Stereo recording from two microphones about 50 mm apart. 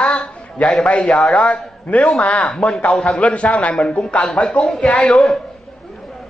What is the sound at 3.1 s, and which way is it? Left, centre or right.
A man's voice, left.